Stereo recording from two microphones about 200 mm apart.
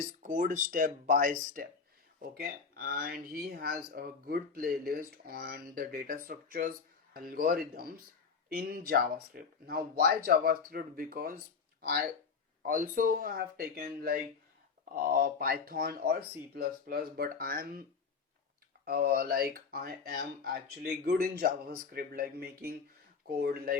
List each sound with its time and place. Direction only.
0.2 s speech: 40° right (ahead or behind)
18.9 s speech: 50° right (ahead or behind)